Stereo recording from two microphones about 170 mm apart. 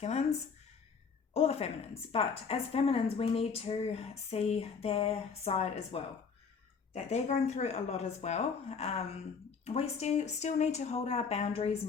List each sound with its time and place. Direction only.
0.0 s a woman's voice: 40° left (ahead or behind)